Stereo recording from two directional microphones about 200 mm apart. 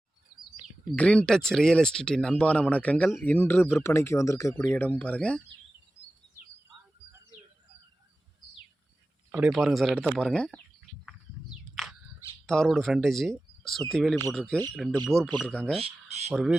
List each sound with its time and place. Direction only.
0.9 s speech: 5° left (ahead or behind)
9.3 s speech: 5° right (ahead or behind)
11.7 s a sound: centre (ahead or behind)
12.5 s speech: centre (ahead or behind)
15.8 s speech: 35° right (ahead or behind)
16.3 s speech: 5° right (ahead or behind)